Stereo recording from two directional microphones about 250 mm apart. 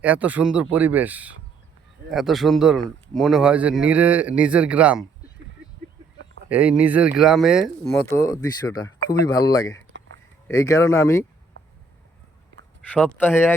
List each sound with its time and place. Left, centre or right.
0.0 s speech: centre
6.5 s speech: centre
12.9 s speech: centre